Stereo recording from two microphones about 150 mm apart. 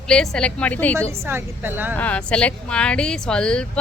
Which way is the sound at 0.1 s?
5° left (ahead or behind).